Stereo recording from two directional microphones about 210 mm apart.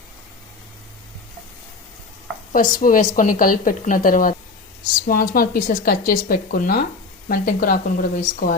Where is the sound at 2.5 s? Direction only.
40° left (ahead or behind).